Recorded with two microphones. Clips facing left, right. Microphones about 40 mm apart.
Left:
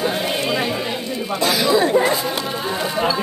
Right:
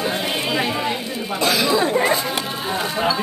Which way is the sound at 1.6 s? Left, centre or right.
Centre.